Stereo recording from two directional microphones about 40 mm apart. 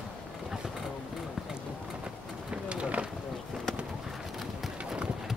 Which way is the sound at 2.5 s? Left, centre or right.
Right.